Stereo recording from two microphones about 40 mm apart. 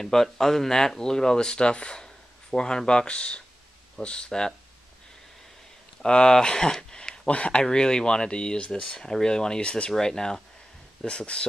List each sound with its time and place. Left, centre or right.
0.0 s speech: centre
6.0 s speech: left
7.2 s speech: left
9.9 s speech: centre